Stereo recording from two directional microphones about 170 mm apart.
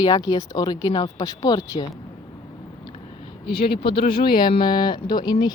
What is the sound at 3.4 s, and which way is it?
Speech, 65° left (ahead or behind).